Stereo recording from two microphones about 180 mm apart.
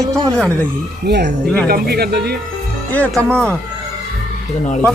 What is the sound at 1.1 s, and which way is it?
Speech, 65° right (ahead or behind).